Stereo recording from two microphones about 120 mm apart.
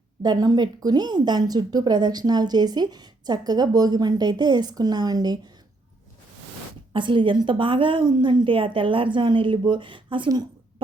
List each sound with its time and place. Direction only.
0.2 s speech: 35° right (ahead or behind)
6.9 s a woman's voice: 45° right (ahead or behind)